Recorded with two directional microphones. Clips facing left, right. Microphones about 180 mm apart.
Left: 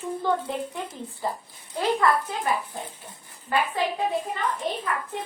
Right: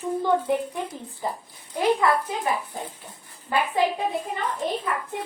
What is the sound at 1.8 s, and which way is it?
Speech, 15° right (ahead or behind).